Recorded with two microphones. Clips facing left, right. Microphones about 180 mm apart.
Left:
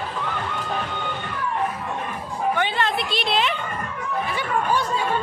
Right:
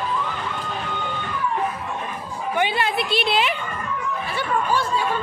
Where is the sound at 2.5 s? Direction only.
10° right (ahead or behind).